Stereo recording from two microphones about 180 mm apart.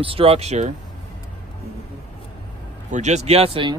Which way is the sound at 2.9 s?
40° right (ahead or behind).